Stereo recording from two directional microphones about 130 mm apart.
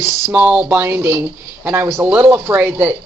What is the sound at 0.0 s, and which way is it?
Speech, 15° right (ahead or behind).